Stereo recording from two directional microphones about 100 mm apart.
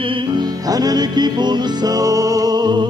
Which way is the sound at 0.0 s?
55° right (ahead or behind).